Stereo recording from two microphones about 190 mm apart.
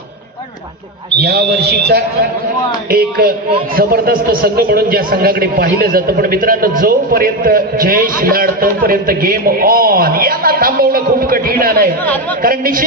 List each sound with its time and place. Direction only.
1.2 s a man's voice: 55° right (ahead or behind)